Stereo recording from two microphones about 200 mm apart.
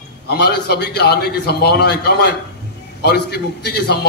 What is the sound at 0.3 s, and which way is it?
A man's voice, 55° left (ahead or behind).